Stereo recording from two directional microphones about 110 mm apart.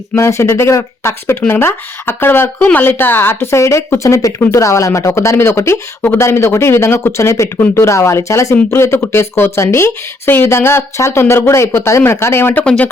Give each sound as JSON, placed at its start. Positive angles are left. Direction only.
{"t": 0.2, "sound": "a woman's voice", "side_deg": 25}